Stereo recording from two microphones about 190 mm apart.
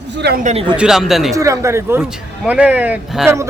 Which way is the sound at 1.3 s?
15° right (ahead or behind).